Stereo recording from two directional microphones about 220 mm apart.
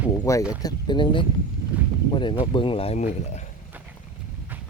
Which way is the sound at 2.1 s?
20° left (ahead or behind).